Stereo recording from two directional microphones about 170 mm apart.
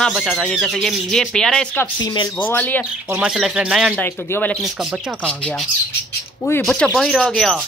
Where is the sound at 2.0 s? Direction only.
25° left (ahead or behind).